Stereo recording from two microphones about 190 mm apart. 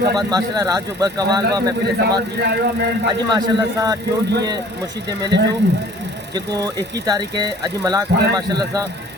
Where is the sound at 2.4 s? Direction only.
60° right (ahead or behind).